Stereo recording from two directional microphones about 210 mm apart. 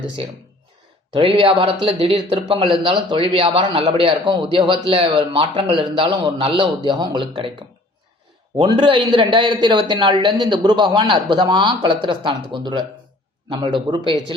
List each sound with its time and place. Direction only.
1.1 s a man's voice: 25° right (ahead or behind)
8.5 s a man's voice: 25° right (ahead or behind)